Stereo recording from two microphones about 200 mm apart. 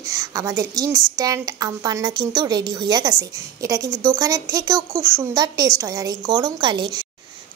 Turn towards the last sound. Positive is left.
turn(degrees=-20)  # may be behind; listen again after turning